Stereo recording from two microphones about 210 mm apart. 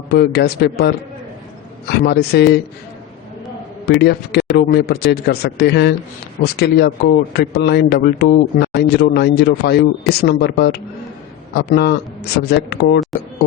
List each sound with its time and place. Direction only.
0.1 s a man's voice: 50° left (ahead or behind)
3.8 s a man's voice: 50° left (ahead or behind)